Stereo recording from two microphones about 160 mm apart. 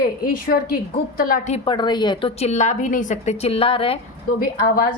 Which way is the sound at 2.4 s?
45° left (ahead or behind).